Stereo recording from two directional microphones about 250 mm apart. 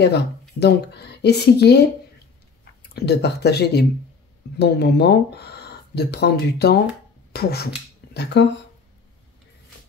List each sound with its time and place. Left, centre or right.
0.0 s speech: left
2.9 s speech: left